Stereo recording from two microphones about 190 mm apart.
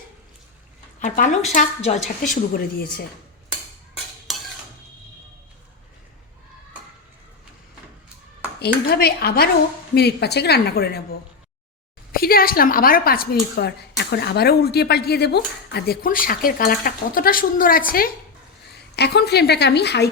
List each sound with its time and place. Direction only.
0.9 s a woman's voice: 45° left (ahead or behind)
8.5 s a woman's voice: 55° left (ahead or behind)
12.1 s a woman's voice: 50° left (ahead or behind)